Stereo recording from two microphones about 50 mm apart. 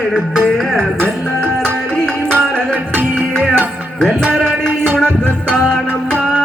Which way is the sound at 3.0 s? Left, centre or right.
Right.